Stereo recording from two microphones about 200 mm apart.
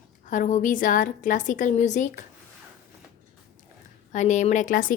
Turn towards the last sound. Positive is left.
turn(degrees=40)  # may be behind; listen again after turning